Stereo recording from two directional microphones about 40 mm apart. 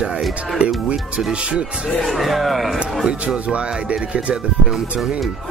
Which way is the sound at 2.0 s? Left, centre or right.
Centre.